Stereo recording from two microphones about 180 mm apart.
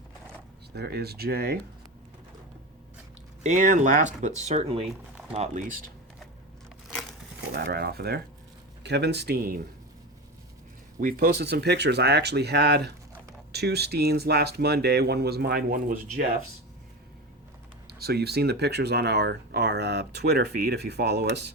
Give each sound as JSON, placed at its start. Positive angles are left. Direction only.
{"t": 0.7, "sound": "speech", "side_deg": -65}
{"t": 3.4, "sound": "speech", "side_deg": -45}
{"t": 7.5, "sound": "speech", "side_deg": -60}
{"t": 11.0, "sound": "speech", "side_deg": -55}
{"t": 17.8, "sound": "speech", "side_deg": -60}